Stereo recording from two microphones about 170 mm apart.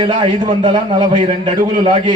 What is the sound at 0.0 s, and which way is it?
A man's voice, 30° right (ahead or behind).